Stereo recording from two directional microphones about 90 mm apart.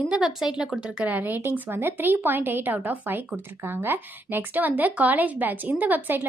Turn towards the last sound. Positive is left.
turn(degrees=-20)  # may be behind; listen again after turning